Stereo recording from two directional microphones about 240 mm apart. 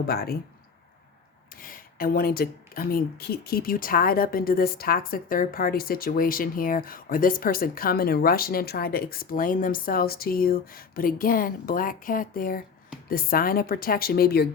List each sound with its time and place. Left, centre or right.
0.1 s speech: left
1.5 s speech: left